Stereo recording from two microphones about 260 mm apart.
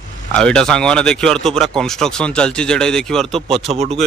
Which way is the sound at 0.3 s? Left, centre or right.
Centre.